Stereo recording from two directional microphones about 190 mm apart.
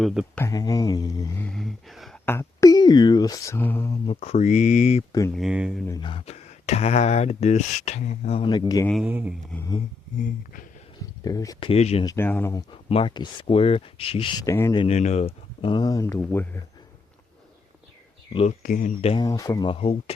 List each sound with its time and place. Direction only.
0.0 s speech: centre (ahead or behind)
0.3 s speech: 15° left (ahead or behind)
4.0 s speech: 35° left (ahead or behind)
5.4 s speech: 5° right (ahead or behind)
5.9 s speech: 25° left (ahead or behind)
8.9 s speech: 5° right (ahead or behind)
11.2 s speech: 20° left (ahead or behind)
11.7 s speech: 35° left (ahead or behind)
12.0 s speech: 10° left (ahead or behind)
12.9 s speech: 30° left (ahead or behind)
14.8 s speech: 35° left (ahead or behind)
15.6 s speech: 25° left (ahead or behind)
18.3 s speech: 40° left (ahead or behind)
19.1 s speech: 20° left (ahead or behind)